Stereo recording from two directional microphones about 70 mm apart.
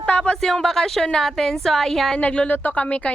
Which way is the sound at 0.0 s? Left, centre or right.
Centre.